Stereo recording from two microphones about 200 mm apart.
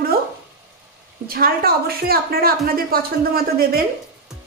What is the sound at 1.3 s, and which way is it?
A woman's voice, 45° right (ahead or behind).